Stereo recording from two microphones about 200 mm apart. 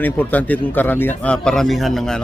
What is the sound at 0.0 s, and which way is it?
A man's voice, 10° left (ahead or behind).